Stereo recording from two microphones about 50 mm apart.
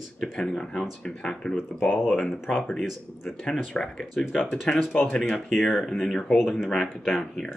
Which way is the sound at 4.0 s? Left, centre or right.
Centre.